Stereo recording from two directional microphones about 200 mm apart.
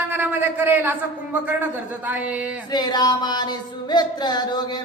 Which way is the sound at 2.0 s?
5° right (ahead or behind).